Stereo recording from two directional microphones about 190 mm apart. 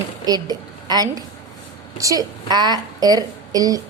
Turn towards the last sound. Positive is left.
turn(degrees=-20)  # may be behind; listen again after turning